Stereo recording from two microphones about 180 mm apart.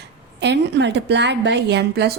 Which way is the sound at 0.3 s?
75° right (ahead or behind).